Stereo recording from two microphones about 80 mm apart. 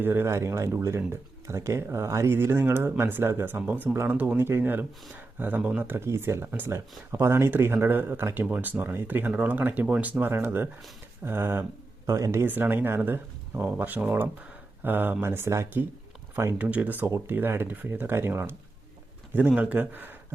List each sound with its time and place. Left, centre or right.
0.0 s speech: right
3.9 s speech: right
12.0 s speech: right
12.5 s speech: right
16.6 s speech: centre
19.7 s speech: right